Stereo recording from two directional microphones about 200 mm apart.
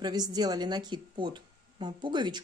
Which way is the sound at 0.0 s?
20° right (ahead or behind).